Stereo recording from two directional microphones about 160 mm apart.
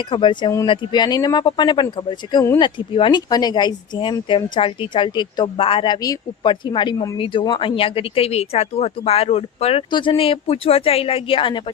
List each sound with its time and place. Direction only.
0.0 s speech: 30° left (ahead or behind)